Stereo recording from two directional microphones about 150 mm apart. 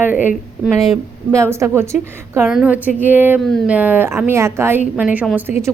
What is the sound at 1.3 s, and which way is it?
A woman's voice, 20° right (ahead or behind).